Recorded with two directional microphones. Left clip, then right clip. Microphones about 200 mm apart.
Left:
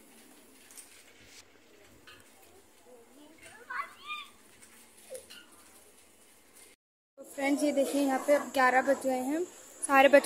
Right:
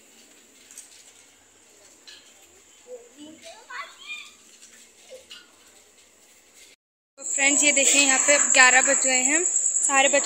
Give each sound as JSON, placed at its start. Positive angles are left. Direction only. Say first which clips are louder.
{"t": 7.3, "sound": "speech", "louder": "right 8 dB", "side_deg": 10}
{"t": 9.8, "sound": "speech", "louder": "even", "side_deg": 25}